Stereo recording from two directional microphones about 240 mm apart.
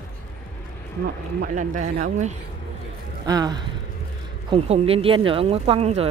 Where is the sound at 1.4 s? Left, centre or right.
Right.